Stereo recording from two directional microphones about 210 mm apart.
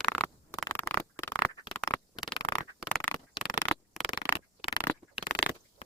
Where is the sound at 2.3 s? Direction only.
15° left (ahead or behind).